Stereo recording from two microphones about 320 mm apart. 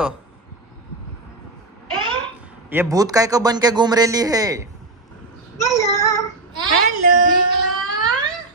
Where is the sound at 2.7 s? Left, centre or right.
Centre.